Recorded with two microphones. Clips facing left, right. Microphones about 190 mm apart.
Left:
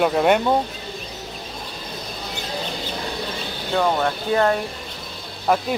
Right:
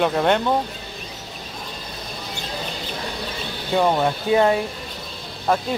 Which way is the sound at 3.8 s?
10° right (ahead or behind).